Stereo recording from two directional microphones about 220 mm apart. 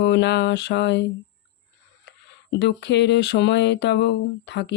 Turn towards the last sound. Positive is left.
turn(degrees=50)  # may be behind; listen again after turning